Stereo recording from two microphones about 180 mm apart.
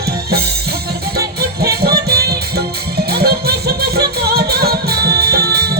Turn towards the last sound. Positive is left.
turn(degrees=-60)  # may be behind; listen again after turning